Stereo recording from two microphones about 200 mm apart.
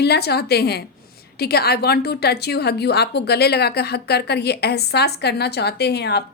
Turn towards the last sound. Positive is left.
turn(degrees=55)  # may be behind; listen again after turning